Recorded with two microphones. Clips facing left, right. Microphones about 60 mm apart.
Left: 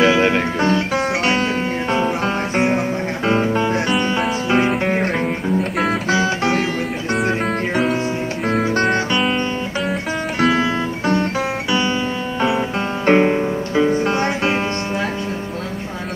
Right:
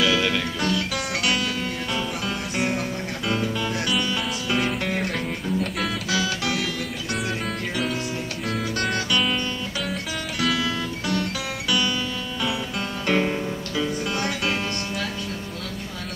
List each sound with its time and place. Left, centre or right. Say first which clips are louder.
0.0 s music: left 7 dB; left
8.5 s music: left 9 dB; left
10.4 s music: left 7 dB; left
12.4 s music: left 9 dB; left